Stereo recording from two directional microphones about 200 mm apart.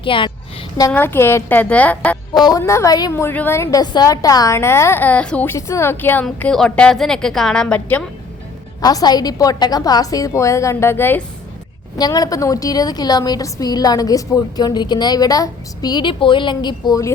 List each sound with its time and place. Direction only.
0.0 s a woman's voice: 25° left (ahead or behind)
0.8 s a woman's voice: 15° left (ahead or behind)
2.4 s a woman's voice: 15° left (ahead or behind)
8.8 s a woman's voice: 20° left (ahead or behind)